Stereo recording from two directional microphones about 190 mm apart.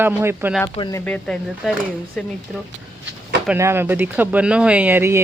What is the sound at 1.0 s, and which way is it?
Speech, 5° left (ahead or behind).